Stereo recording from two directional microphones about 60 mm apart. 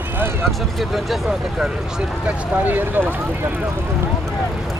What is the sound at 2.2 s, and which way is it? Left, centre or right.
Speech, right.